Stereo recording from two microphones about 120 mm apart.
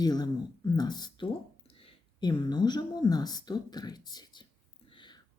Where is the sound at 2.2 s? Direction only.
35° left (ahead or behind).